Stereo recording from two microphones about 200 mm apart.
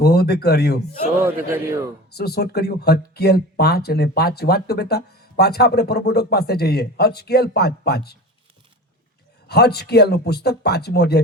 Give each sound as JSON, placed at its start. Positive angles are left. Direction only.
{"t": 0.0, "sound": "speech", "side_deg": 55}
{"t": 1.2, "sound": "a man's voice", "side_deg": -10}
{"t": 2.1, "sound": "speech", "side_deg": 55}
{"t": 9.5, "sound": "speech", "side_deg": 55}